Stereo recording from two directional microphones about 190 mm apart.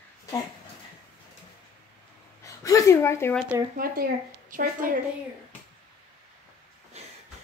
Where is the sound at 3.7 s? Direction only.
50° right (ahead or behind).